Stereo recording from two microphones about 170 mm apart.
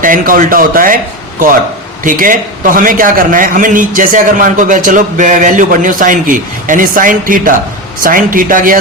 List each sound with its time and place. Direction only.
0.0 s a man's voice: 55° right (ahead or behind)
2.0 s a man's voice: 50° right (ahead or behind)